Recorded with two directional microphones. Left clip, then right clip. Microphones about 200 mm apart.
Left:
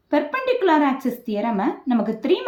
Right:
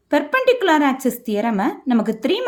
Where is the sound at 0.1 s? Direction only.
45° right (ahead or behind).